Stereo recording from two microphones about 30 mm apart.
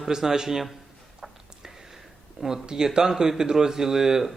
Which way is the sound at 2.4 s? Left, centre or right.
Centre.